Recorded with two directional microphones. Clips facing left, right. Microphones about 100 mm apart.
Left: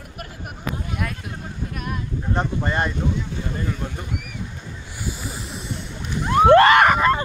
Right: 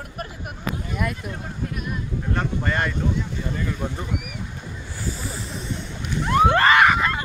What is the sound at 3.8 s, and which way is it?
Speech, 15° right (ahead or behind).